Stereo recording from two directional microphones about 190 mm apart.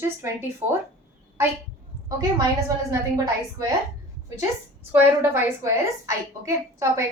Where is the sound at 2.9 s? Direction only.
15° right (ahead or behind).